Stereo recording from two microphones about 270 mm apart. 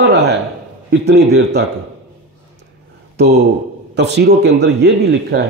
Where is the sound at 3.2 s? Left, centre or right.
Right.